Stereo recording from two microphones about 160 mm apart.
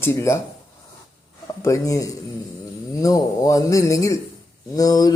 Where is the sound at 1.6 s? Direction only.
20° left (ahead or behind).